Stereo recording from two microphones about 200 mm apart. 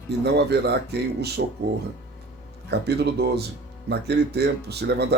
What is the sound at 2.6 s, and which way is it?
Speech, 55° right (ahead or behind).